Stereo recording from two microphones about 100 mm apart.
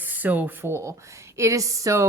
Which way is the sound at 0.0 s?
15° right (ahead or behind).